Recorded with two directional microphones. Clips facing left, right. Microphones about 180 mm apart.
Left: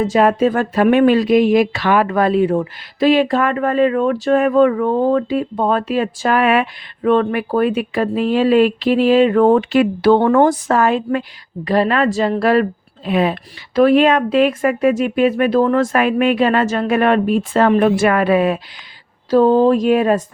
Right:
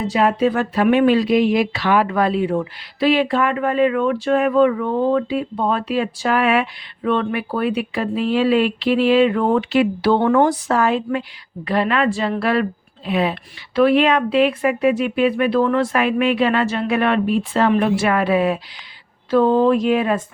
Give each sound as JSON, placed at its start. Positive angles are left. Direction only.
{"t": 0.0, "sound": "speech", "side_deg": 45}
{"t": 19.3, "sound": "speech", "side_deg": 35}